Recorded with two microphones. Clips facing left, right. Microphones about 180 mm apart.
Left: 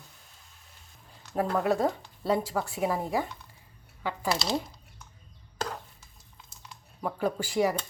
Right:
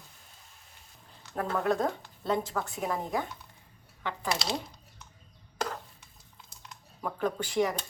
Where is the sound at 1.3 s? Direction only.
10° left (ahead or behind).